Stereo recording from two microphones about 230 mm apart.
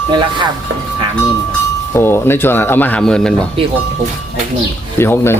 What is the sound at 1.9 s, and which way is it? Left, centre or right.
Speech, centre.